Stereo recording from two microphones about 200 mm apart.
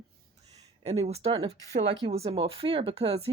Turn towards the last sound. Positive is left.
turn(degrees=-30)  # may be behind; listen again after turning